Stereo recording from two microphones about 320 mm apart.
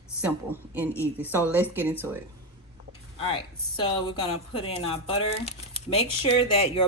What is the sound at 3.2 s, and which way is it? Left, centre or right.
Speech, centre.